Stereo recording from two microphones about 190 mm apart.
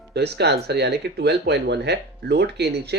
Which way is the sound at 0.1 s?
60° right (ahead or behind).